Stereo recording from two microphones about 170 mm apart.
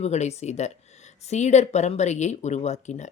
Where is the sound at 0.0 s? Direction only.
40° left (ahead or behind).